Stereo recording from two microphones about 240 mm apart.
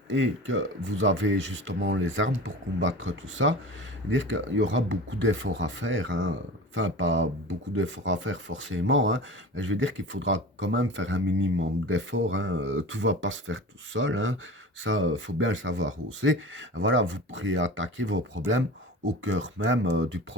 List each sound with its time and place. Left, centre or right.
0.1 s speech: right